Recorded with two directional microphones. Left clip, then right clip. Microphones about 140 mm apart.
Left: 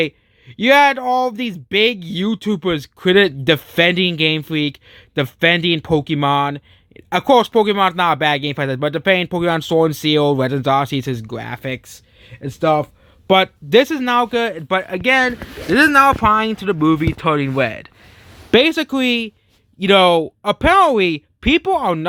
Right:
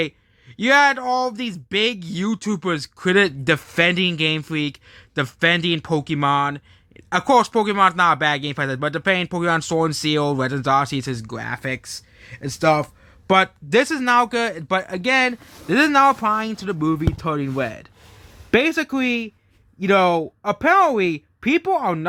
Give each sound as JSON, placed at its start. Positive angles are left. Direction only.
{"t": 0.5, "sound": "speech", "side_deg": 35}
{"t": 11.3, "sound": "speech", "side_deg": 20}
{"t": 14.9, "sound": "speech", "side_deg": 5}
{"t": 16.0, "sound": "speech", "side_deg": 15}
{"t": 18.7, "sound": "speech", "side_deg": 15}
{"t": 18.9, "sound": "speech", "side_deg": 30}